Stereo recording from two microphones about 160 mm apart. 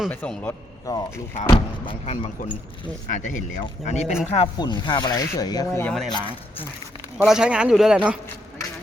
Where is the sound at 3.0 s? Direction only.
50° left (ahead or behind).